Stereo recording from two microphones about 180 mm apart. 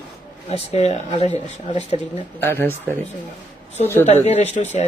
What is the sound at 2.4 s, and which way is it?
Speech, 15° left (ahead or behind).